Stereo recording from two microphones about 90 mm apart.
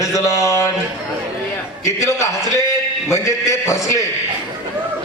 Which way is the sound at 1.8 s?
35° left (ahead or behind).